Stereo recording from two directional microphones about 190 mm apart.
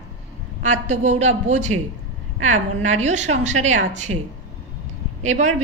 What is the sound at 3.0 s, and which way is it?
A woman's voice, 35° right (ahead or behind).